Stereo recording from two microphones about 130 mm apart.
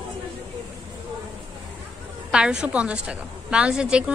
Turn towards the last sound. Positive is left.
turn(degrees=-5)  # may be behind; listen again after turning